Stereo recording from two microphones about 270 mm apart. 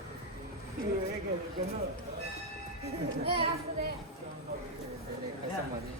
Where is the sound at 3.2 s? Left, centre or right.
Right.